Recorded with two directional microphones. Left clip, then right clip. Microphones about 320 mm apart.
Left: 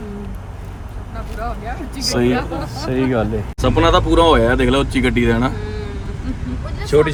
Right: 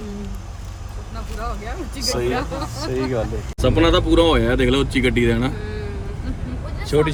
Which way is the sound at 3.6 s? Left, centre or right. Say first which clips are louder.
Left 2 dB; centre.